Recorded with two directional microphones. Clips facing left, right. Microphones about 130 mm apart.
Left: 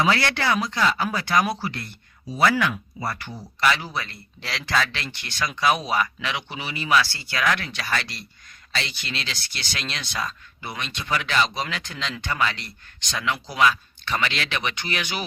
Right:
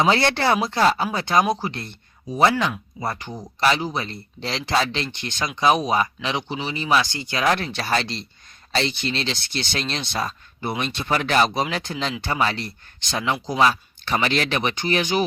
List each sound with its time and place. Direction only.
0.0 s speech: 25° right (ahead or behind)
3.6 s speech: 30° right (ahead or behind)
6.2 s speech: 30° right (ahead or behind)
11.7 s speech: 30° right (ahead or behind)